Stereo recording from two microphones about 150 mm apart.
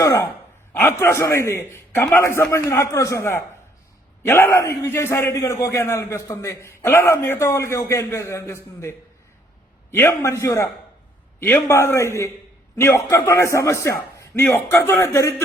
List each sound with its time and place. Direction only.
0.0 s a man's voice: 20° left (ahead or behind)